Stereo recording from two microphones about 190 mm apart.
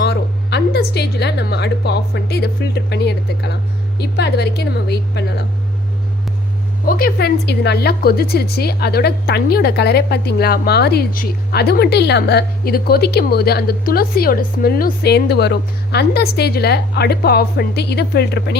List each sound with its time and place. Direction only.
0.0 s a woman's voice: 60° left (ahead or behind)
6.8 s a woman's voice: 50° left (ahead or behind)